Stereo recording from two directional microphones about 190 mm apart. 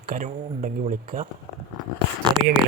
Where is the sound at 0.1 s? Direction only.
40° right (ahead or behind).